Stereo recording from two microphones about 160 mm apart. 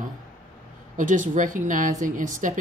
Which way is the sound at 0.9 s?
55° right (ahead or behind).